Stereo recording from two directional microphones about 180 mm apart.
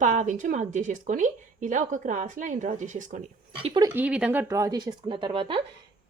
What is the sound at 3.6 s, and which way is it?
Speech, 30° right (ahead or behind).